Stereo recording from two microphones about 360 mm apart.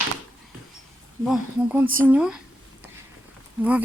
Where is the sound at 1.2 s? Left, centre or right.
Centre.